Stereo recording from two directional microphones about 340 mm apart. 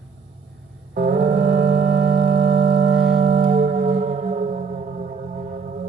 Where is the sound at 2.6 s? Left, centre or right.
Centre.